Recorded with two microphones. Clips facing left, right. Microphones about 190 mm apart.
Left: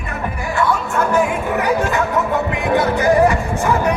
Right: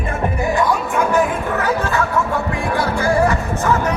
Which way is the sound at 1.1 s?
15° left (ahead or behind).